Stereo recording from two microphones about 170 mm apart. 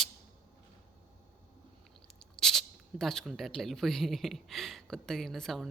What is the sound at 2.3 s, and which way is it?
Speech, centre (ahead or behind).